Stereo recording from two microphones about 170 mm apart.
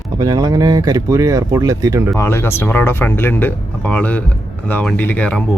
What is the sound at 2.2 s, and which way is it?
Speech, 15° left (ahead or behind).